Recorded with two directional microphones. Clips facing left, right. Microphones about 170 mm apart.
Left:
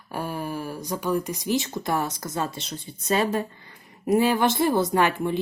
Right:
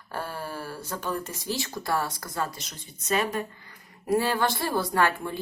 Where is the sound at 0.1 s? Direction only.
15° left (ahead or behind).